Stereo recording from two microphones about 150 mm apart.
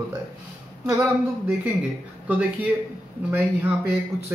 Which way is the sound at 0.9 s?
10° right (ahead or behind).